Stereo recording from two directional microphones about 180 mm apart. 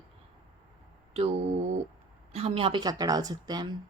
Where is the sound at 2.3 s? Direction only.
35° right (ahead or behind).